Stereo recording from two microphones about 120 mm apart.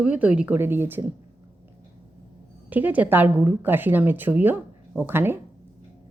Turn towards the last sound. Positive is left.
turn(degrees=-20)  # may be behind; listen again after turning